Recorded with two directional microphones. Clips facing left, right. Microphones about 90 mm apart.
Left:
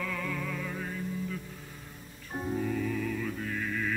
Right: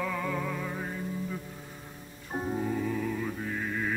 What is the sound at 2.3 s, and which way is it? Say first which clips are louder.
Music: right 2 dB; 35° right (ahead or behind).